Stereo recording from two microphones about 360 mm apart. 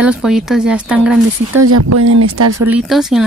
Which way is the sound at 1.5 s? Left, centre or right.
Right.